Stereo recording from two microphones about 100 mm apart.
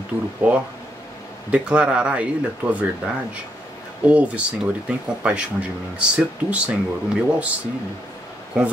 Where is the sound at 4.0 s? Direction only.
15° right (ahead or behind).